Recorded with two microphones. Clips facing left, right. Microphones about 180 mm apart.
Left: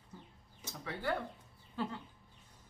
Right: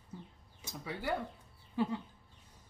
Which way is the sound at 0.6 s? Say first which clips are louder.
Right 1 dB; 10° right (ahead or behind).